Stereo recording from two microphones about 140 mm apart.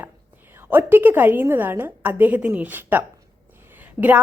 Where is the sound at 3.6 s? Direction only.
15° right (ahead or behind).